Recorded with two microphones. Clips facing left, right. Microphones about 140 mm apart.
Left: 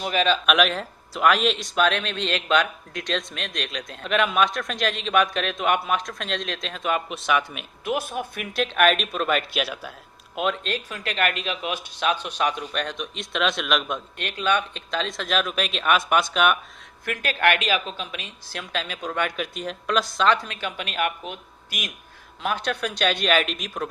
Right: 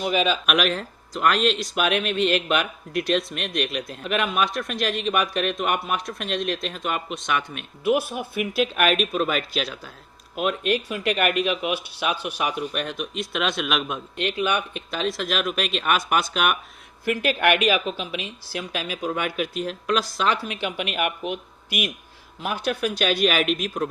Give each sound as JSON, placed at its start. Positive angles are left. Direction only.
{"t": 0.0, "sound": "speech", "side_deg": -5}
{"t": 10.3, "sound": "speech", "side_deg": -5}
{"t": 17.2, "sound": "speech", "side_deg": -15}